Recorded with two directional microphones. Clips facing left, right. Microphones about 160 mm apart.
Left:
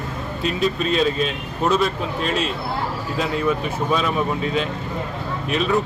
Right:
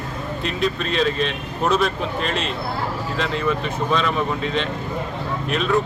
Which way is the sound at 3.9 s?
10° left (ahead or behind).